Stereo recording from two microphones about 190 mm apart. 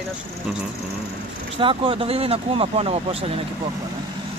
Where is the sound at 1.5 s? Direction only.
25° right (ahead or behind).